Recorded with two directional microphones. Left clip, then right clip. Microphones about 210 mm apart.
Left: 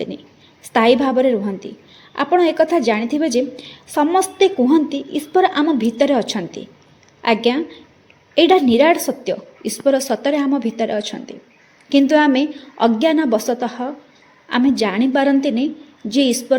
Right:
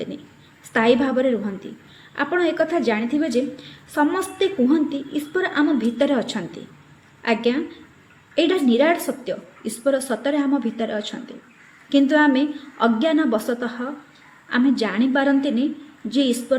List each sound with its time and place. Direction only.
0.7 s a woman's voice: 25° left (ahead or behind)